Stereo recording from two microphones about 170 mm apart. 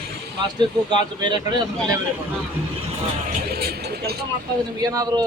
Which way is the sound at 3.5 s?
65° right (ahead or behind).